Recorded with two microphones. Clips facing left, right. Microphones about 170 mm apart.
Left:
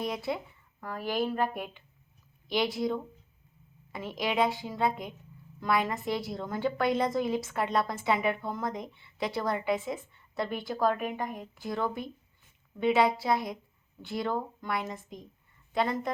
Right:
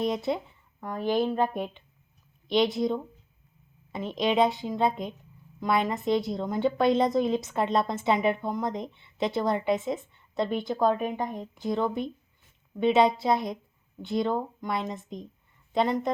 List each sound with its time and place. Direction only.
0.0 s a woman's voice: 25° right (ahead or behind)